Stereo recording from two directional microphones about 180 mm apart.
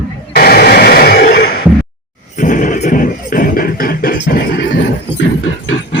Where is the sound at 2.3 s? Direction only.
45° left (ahead or behind).